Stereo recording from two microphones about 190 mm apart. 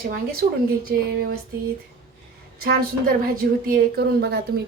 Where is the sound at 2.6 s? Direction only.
55° right (ahead or behind).